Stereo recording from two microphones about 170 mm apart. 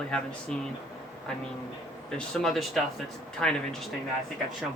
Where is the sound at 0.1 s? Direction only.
5° left (ahead or behind).